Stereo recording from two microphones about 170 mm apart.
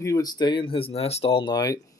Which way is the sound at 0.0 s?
20° left (ahead or behind).